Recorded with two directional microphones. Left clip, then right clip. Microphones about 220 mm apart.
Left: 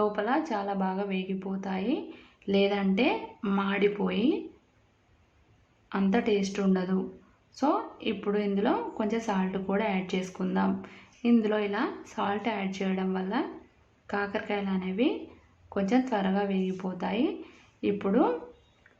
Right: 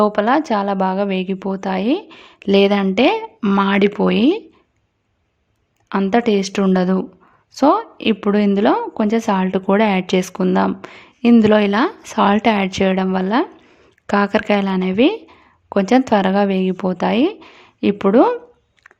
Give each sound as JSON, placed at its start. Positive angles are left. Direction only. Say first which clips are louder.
{"t": 0.0, "sound": "a woman's voice", "louder": "right 12 dB", "side_deg": -50}
{"t": 5.9, "sound": "a woman's voice", "louder": "right 11 dB", "side_deg": -50}